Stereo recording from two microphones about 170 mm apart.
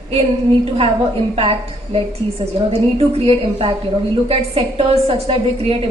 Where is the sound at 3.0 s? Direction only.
35° right (ahead or behind).